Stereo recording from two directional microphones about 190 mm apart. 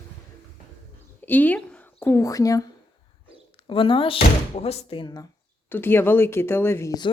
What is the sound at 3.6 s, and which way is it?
Speech, 30° left (ahead or behind).